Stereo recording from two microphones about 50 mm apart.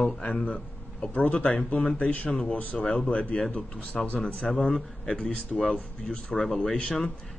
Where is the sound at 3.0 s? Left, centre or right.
Left.